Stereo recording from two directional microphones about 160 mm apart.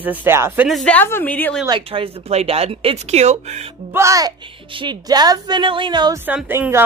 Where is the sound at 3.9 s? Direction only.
20° right (ahead or behind).